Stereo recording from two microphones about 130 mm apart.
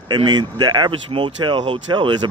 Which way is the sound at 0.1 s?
35° right (ahead or behind).